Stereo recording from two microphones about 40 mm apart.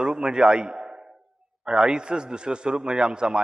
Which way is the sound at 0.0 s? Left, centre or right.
Right.